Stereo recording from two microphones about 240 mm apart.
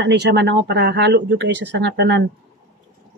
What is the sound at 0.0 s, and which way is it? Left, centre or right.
Speech, right.